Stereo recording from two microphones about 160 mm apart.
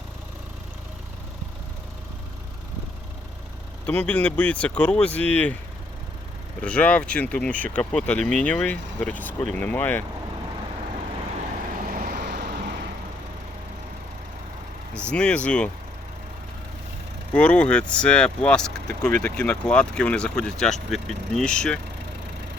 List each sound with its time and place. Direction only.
3.8 s speech: 10° left (ahead or behind)
6.6 s speech: 5° left (ahead or behind)
11.9 s vehicle: 65° right (ahead or behind); by 12.9 s 90° right
15.1 s speech: 5° left (ahead or behind)
17.3 s speech: 10° left (ahead or behind)